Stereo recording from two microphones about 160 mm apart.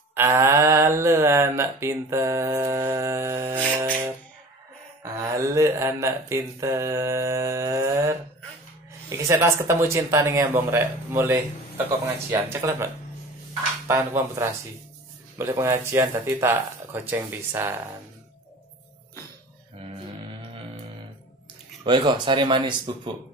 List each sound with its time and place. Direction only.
0.1 s mantra: 15° right (ahead or behind)
5.0 s speech: 20° right (ahead or behind)
9.3 s speech: 15° right (ahead or behind)
21.8 s speech: 30° right (ahead or behind)